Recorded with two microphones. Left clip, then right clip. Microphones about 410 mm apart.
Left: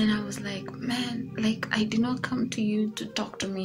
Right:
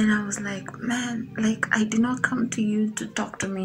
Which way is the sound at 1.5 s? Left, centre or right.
Left.